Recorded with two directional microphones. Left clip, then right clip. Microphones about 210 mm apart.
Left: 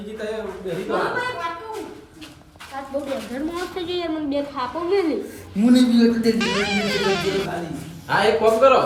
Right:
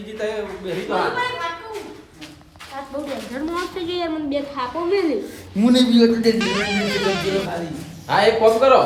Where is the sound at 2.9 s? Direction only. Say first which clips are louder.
Left 1 dB; centre (ahead or behind).